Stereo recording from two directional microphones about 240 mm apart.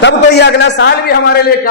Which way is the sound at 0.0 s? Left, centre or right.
Left.